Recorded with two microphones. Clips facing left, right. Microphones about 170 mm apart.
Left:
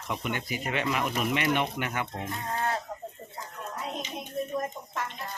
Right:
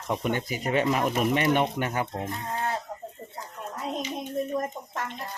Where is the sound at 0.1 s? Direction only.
45° right (ahead or behind).